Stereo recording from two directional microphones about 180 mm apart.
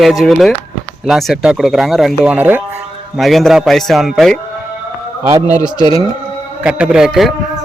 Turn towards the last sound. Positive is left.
turn(degrees=0)  # may be behind; listen again after turning